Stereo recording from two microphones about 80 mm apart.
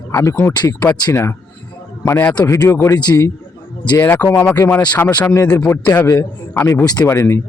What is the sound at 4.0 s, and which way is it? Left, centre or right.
Speech, left.